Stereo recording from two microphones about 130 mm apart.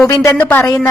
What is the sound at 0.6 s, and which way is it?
Speech, 25° left (ahead or behind).